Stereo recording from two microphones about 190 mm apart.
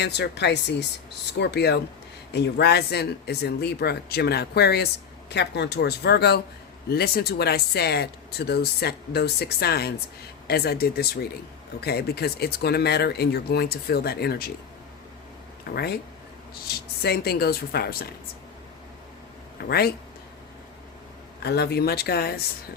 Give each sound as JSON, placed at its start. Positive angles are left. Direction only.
{"t": 0.0, "sound": "speech", "side_deg": 60}
{"t": 15.6, "sound": "speech", "side_deg": 55}
{"t": 19.5, "sound": "speech", "side_deg": 55}
{"t": 21.4, "sound": "speech", "side_deg": 60}